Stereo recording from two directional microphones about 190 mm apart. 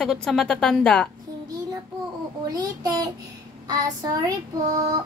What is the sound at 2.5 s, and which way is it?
Child singing, 20° right (ahead or behind).